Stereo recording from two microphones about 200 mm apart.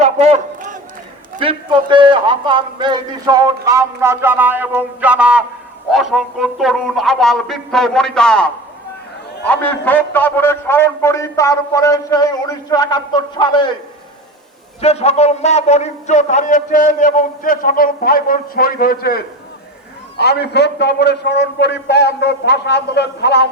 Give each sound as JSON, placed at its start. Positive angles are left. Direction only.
{"t": 0.0, "sound": "a sound", "side_deg": -35}
{"t": 1.4, "sound": "a man's voice", "side_deg": -25}
{"t": 9.5, "sound": "a man's voice", "side_deg": 10}
{"t": 14.8, "sound": "a man's voice", "side_deg": 30}